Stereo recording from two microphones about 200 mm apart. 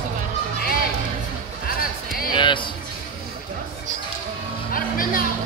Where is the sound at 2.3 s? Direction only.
25° left (ahead or behind).